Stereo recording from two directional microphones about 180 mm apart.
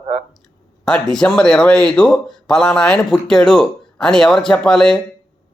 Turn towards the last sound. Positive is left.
turn(degrees=5)  # may be behind; listen again after turning